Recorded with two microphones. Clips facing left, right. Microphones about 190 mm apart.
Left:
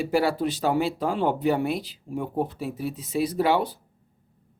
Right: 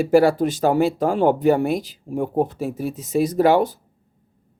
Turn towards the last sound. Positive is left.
turn(degrees=-45)  # may be behind; listen again after turning